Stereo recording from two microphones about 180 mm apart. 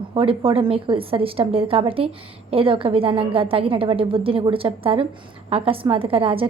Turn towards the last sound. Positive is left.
turn(degrees=-30)  # may be behind; listen again after turning